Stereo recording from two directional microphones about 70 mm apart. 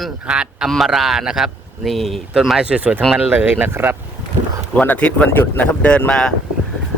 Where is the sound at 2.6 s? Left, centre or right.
Centre.